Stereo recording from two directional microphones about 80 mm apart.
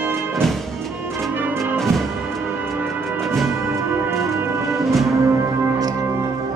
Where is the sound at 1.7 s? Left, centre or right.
Centre.